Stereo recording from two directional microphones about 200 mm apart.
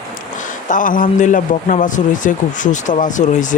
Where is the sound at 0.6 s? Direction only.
40° left (ahead or behind).